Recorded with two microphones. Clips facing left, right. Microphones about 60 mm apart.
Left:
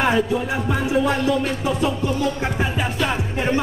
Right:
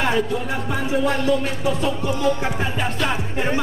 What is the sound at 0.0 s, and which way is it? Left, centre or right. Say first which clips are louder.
Speech: left 2 dB; centre.